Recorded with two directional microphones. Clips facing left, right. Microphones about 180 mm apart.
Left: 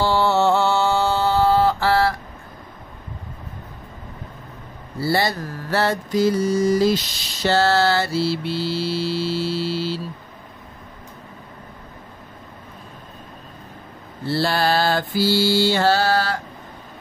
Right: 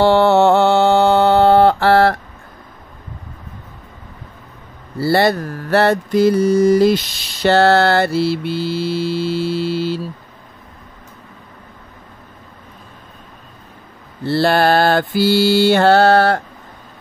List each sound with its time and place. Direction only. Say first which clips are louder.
0.0 s mantra: right 7 dB; 60° right (ahead or behind)
5.0 s mantra: right 7 dB; 60° right (ahead or behind)
14.2 s mantra: right 6 dB; 60° right (ahead or behind)